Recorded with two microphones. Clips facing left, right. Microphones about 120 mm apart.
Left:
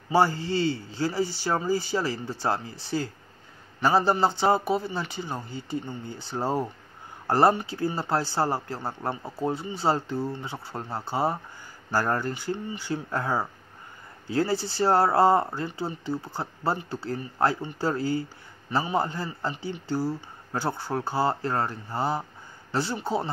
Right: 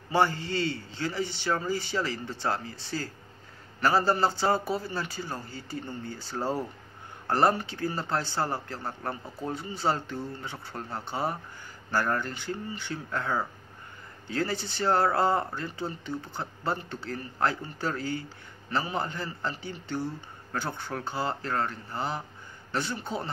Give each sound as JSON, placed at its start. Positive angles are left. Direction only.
{"t": 0.1, "sound": "speech", "side_deg": 30}